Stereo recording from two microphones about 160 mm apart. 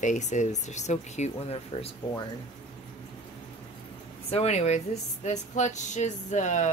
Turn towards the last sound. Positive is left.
turn(degrees=50)  # may be behind; listen again after turning